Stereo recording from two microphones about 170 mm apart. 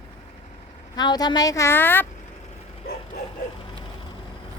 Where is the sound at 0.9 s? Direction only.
25° left (ahead or behind).